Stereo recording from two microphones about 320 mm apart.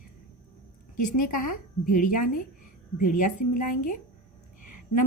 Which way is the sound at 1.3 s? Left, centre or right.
Left.